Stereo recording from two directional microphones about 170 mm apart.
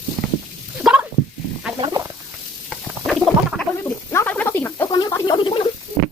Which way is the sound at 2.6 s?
Centre (ahead or behind).